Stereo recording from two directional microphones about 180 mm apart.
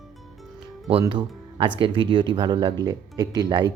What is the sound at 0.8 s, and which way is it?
Speech, 25° right (ahead or behind).